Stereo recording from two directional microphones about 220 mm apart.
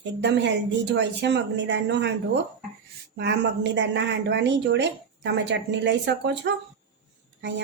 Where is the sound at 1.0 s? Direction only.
55° right (ahead or behind).